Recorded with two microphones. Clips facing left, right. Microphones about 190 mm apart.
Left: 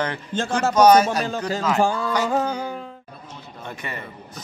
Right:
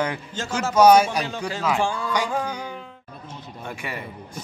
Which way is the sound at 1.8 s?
40° left (ahead or behind).